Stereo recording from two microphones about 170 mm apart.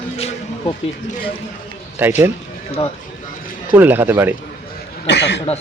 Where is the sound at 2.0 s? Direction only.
10° right (ahead or behind).